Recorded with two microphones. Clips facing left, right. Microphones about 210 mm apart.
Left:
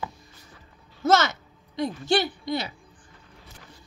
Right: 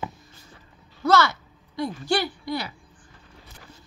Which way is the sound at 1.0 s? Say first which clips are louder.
Right 1 dB; 20° left (ahead or behind).